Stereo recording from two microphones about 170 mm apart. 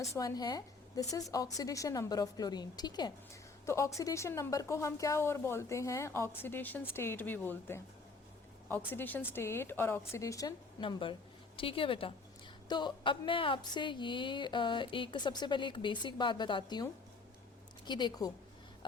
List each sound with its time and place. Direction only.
0.1 s a woman's voice: 20° left (ahead or behind)
8.9 s a woman's voice: 10° left (ahead or behind); by 18.3 s 25° left (ahead or behind)